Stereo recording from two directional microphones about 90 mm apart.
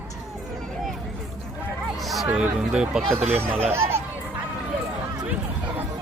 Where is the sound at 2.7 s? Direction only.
10° right (ahead or behind).